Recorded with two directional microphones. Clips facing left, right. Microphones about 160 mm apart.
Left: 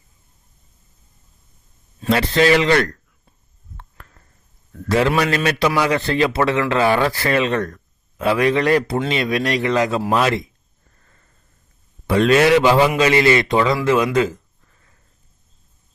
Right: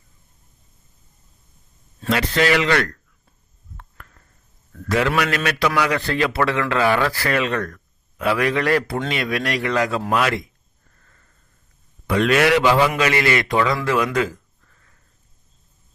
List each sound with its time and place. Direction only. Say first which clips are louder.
2.0 s a man's voice: left 4 dB; 30° left (ahead or behind)
4.7 s a man's voice: left 3 dB; 30° left (ahead or behind)
12.0 s a man's voice: left 3 dB; 30° left (ahead or behind)
13.8 s a sound: left 4 dB; 20° left (ahead or behind)